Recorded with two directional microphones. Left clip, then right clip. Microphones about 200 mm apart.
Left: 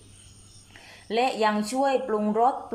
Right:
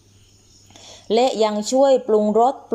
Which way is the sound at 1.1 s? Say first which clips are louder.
Right 6 dB; 25° right (ahead or behind).